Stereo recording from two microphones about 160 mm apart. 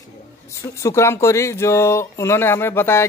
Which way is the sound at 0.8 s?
15° left (ahead or behind).